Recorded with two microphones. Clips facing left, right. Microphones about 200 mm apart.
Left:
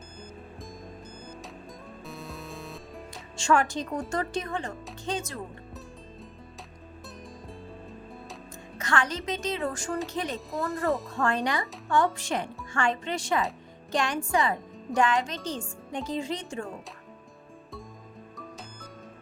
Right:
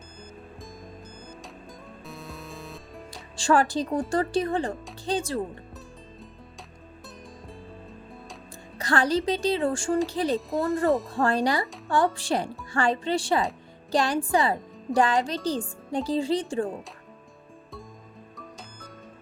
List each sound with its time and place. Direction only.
0.2 s music: centre (ahead or behind)
3.3 s speech: 35° right (ahead or behind)
8.8 s speech: 35° right (ahead or behind)
10.5 s speech: centre (ahead or behind)
11.1 s speech: 35° right (ahead or behind)
18.3 s music: centre (ahead or behind)